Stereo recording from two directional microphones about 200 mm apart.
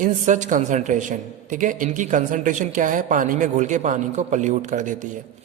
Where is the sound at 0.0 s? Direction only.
40° right (ahead or behind).